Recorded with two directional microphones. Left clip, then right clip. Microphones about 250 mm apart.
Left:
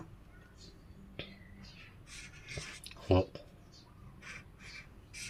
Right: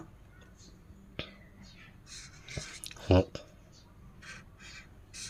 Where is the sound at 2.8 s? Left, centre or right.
Right.